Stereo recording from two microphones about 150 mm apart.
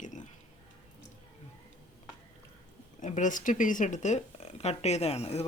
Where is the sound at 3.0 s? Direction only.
55° left (ahead or behind).